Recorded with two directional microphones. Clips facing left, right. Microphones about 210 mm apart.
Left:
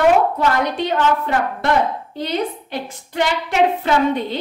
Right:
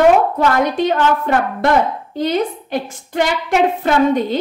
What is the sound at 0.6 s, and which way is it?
A woman's voice, 45° right (ahead or behind).